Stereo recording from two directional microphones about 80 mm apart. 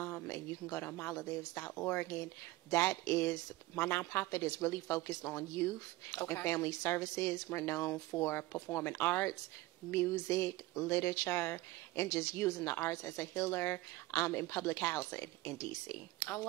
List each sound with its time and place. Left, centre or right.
0.0 s speech: left